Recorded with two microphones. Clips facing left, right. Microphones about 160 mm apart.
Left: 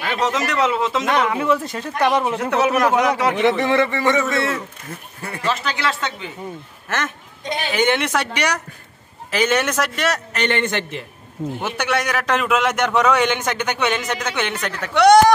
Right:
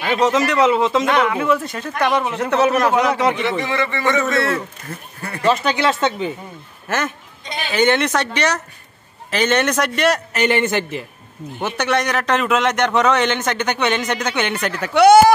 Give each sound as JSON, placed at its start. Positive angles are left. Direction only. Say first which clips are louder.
{"t": 0.0, "sound": "a man's voice", "louder": "right 5 dB", "side_deg": 0}
{"t": 1.3, "sound": "a man's voice", "louder": "right 1 dB", "side_deg": 30}
{"t": 2.3, "sound": "a man's voice", "louder": "right 2 dB", "side_deg": 10}
{"t": 3.4, "sound": "a man's voice", "louder": "left 4 dB", "side_deg": 60}
{"t": 3.9, "sound": "a man's voice", "louder": "left 1 dB", "side_deg": 30}
{"t": 5.4, "sound": "speech", "louder": "right 6 dB", "side_deg": -20}
{"t": 6.9, "sound": "a man's voice", "louder": "right 3 dB", "side_deg": 0}
{"t": 7.7, "sound": "a man's voice", "louder": "right 3 dB", "side_deg": 10}
{"t": 11.6, "sound": "a man's voice", "louder": "right 4 dB", "side_deg": 10}